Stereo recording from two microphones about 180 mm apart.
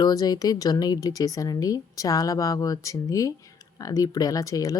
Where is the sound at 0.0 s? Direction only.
20° left (ahead or behind).